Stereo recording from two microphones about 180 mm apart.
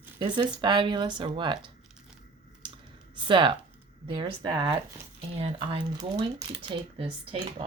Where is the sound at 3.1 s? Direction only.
25° right (ahead or behind).